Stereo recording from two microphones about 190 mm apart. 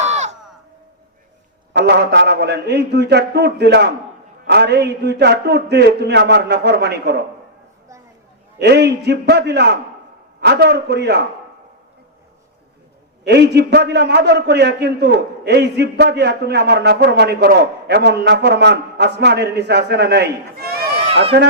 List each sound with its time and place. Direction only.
0.0 s a sound: 35° right (ahead or behind)
1.7 s a man's voice: 60° right (ahead or behind)
8.5 s a man's voice: 60° right (ahead or behind)
13.2 s a man's voice: 60° right (ahead or behind)
21.0 s run: 30° right (ahead or behind)